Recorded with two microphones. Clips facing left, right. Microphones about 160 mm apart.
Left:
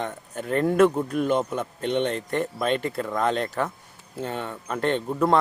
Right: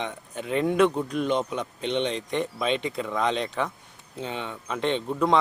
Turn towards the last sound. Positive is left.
turn(degrees=5)  # may be behind; listen again after turning